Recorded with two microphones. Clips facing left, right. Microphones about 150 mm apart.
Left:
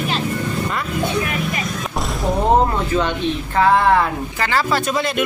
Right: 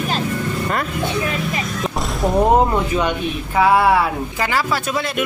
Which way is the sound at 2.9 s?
10° right (ahead or behind).